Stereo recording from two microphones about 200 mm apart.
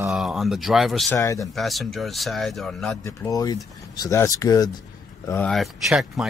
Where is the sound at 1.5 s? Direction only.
Centre (ahead or behind).